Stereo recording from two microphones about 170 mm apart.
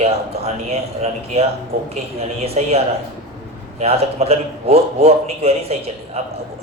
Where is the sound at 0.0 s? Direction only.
40° right (ahead or behind).